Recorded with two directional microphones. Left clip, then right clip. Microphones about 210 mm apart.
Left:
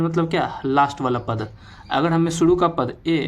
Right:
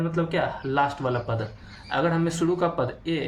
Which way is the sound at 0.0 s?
50° left (ahead or behind).